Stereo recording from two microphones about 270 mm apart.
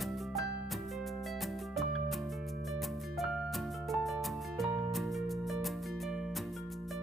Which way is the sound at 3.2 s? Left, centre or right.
Centre.